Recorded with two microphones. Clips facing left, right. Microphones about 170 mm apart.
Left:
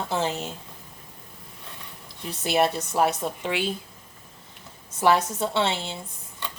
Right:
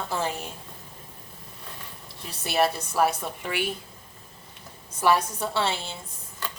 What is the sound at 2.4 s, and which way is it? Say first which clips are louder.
A woman's voice: left 2 dB; 20° left (ahead or behind).